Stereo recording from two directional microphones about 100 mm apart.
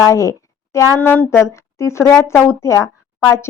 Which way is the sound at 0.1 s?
30° left (ahead or behind).